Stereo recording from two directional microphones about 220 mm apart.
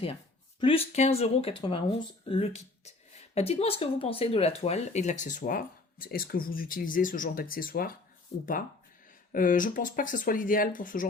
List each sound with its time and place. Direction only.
0.6 s speech: 25° left (ahead or behind); by 7.9 s 40° left (ahead or behind)
8.3 s speech: 25° left (ahead or behind)
9.3 s speech: 40° left (ahead or behind)